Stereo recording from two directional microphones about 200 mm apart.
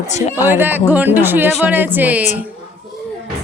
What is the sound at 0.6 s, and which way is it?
Speech, 10° right (ahead or behind).